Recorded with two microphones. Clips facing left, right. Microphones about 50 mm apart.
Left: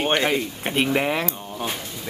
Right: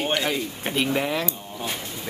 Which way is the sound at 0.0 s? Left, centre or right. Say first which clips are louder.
Left 3 dB; left.